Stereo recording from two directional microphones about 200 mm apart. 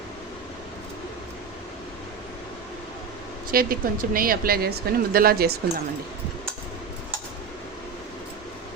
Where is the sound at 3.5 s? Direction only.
45° right (ahead or behind).